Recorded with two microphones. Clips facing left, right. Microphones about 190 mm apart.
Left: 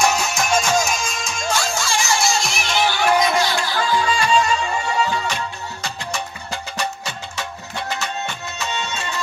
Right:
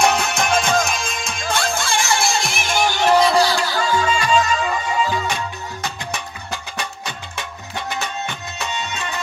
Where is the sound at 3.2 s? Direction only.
35° right (ahead or behind).